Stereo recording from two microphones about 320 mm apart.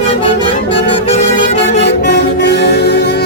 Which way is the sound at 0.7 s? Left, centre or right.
Centre.